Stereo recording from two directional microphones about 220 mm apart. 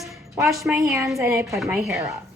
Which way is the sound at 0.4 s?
5° right (ahead or behind).